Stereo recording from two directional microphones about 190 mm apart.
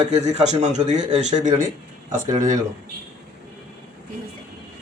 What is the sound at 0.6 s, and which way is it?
Speech, 35° right (ahead or behind).